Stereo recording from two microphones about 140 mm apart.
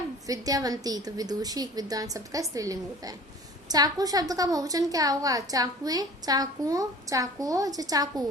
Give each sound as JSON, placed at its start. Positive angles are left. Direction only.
{"t": 0.3, "sound": "a woman's voice", "side_deg": -25}